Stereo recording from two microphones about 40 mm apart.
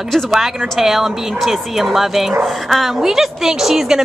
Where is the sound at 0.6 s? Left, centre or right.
Centre.